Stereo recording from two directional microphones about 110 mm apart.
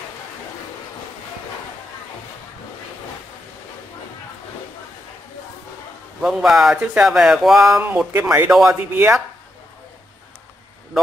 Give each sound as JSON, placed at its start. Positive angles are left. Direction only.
{"t": 6.2, "sound": "speech", "side_deg": 0}
{"t": 7.8, "sound": "speech", "side_deg": -15}